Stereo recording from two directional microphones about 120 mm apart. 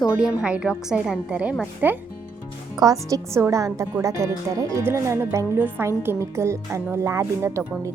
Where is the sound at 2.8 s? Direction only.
30° right (ahead or behind).